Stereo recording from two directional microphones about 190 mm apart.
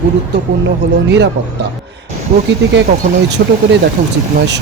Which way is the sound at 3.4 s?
60° right (ahead or behind).